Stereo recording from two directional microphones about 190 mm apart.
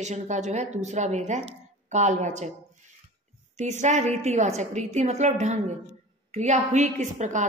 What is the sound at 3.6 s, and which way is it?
A woman's voice, 40° right (ahead or behind).